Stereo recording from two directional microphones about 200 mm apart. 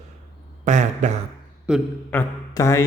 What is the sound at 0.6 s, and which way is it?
Speech, 35° right (ahead or behind).